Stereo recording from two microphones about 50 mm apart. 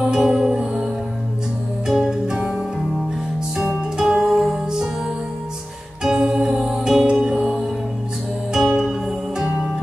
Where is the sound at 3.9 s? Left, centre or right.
Centre.